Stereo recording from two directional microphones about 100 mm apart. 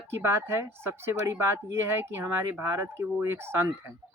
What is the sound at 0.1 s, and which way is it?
Speech, 25° right (ahead or behind).